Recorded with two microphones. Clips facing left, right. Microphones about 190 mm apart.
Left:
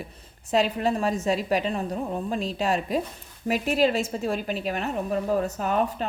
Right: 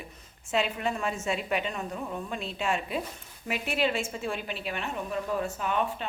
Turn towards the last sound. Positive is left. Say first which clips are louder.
# left 5 dB
turn(degrees=40)  # may be behind; listen again after turning